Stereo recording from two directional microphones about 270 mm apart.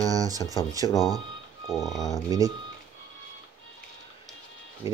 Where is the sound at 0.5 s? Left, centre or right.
Centre.